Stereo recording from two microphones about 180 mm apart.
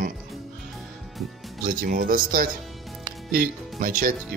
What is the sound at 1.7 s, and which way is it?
Speech, 50° right (ahead or behind).